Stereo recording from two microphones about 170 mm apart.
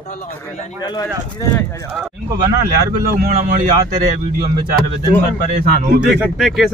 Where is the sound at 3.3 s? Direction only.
45° right (ahead or behind).